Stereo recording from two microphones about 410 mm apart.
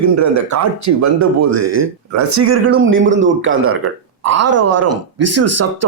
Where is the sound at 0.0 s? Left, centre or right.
Right.